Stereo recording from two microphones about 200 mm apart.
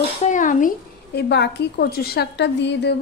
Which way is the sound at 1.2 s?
60° left (ahead or behind).